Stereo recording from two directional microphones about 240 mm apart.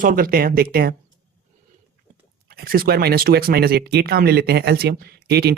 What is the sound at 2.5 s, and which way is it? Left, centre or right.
Speech, right.